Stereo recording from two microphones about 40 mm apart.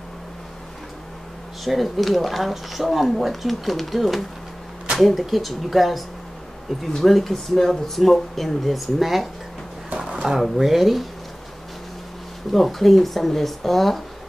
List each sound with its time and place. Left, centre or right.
1.6 s speech: centre
9.9 s a sound: right
10.6 s speech: centre
12.5 s speech: centre